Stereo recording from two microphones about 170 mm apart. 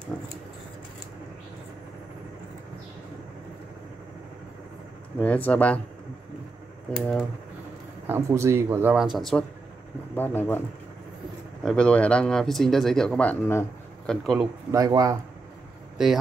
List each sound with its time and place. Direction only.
5.2 s speech: 10° left (ahead or behind)
7.0 s speech: centre (ahead or behind)
8.1 s speech: 15° right (ahead or behind); by 9.4 s centre (ahead or behind)
10.1 s speech: 10° left (ahead or behind)
11.6 s speech: 5° left (ahead or behind)
14.0 s speech: centre (ahead or behind)
14.7 s speech: 20° right (ahead or behind)
16.0 s speech: 5° right (ahead or behind)